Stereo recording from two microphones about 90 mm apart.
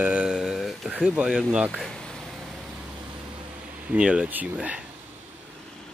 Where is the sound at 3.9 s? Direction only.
15° right (ahead or behind).